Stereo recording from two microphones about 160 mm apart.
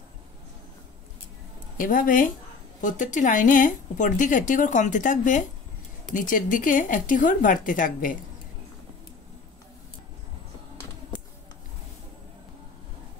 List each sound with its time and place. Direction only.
1.8 s a woman's voice: 55° left (ahead or behind)